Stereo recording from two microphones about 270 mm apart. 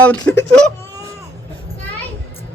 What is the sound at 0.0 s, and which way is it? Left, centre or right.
Speech, centre.